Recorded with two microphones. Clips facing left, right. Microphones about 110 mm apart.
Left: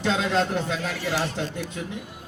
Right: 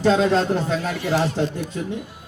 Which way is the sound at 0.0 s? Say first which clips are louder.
Right 6 dB; 40° right (ahead or behind).